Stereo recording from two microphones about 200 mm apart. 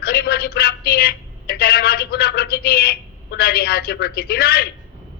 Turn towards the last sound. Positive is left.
turn(degrees=50)  # may be behind; listen again after turning